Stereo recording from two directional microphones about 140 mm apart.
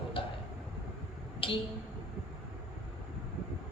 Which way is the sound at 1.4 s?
40° left (ahead or behind).